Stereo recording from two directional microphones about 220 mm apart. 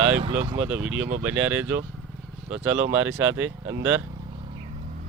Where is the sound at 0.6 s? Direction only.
5° right (ahead or behind).